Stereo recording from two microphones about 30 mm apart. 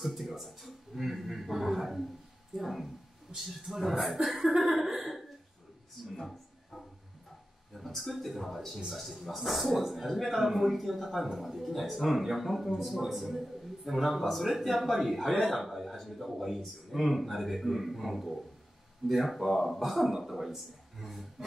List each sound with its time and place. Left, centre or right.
0.0 s a man's voice: centre
7.7 s a man's voice: centre